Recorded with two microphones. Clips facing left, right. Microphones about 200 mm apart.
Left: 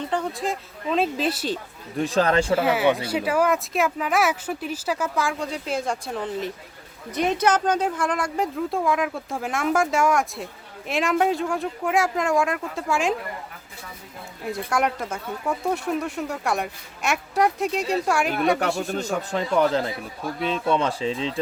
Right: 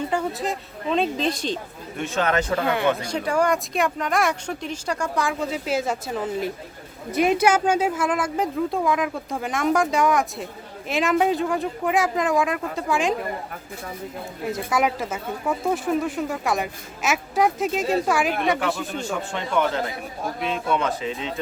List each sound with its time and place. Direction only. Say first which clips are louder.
0.1 s speech: right 1 dB; 5° right (ahead or behind)
2.0 s speech: left 3 dB; 35° left (ahead or behind)
2.6 s speech: left 2 dB; 5° left (ahead or behind)
14.4 s speech: right 1 dB; centre (ahead or behind)
18.9 s speech: left 2 dB; 35° left (ahead or behind)